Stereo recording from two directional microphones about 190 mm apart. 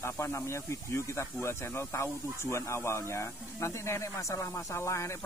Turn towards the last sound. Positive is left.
turn(degrees=15)  # may be behind; listen again after turning